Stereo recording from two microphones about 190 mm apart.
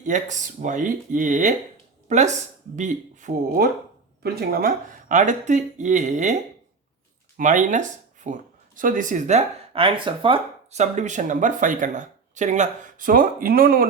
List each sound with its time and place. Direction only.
0.0 s speech: 40° right (ahead or behind)
7.3 s speech: 40° right (ahead or behind)